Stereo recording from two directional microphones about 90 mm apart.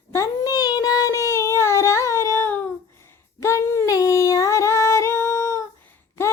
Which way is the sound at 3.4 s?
30° left (ahead or behind).